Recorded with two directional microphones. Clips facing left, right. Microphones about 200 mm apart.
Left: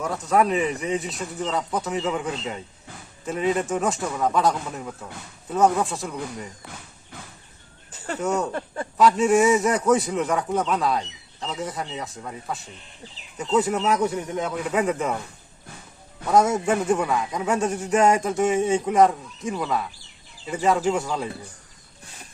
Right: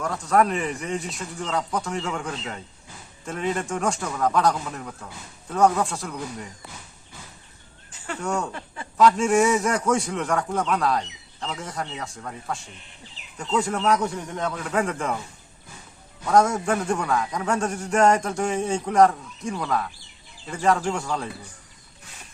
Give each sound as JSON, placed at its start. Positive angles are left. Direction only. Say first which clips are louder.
{"t": 0.0, "sound": "a man's voice", "louder": "even", "side_deg": 0}
{"t": 8.2, "sound": "a man's voice", "louder": "left 3 dB", "side_deg": 0}
{"t": 8.5, "sound": "speech", "louder": "left 8 dB", "side_deg": 45}
{"t": 9.0, "sound": "a man's voice", "louder": "left 1 dB", "side_deg": 0}
{"t": 16.3, "sound": "a man's voice", "louder": "left 1 dB", "side_deg": 5}